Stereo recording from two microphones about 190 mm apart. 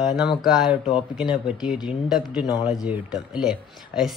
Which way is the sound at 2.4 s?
20° left (ahead or behind).